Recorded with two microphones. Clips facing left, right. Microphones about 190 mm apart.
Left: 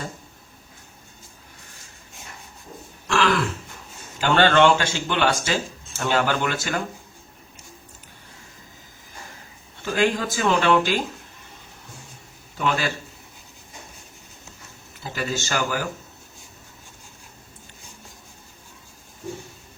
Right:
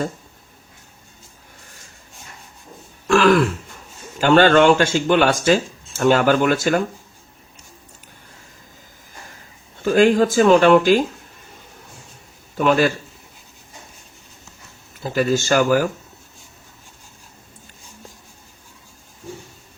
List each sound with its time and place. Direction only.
3.1 s throat clearing: 50° right (ahead or behind)
4.2 s speech: 50° right (ahead or behind)
9.8 s speech: 45° right (ahead or behind)
12.5 s speech: 50° right (ahead or behind)
15.0 s speech: 50° right (ahead or behind)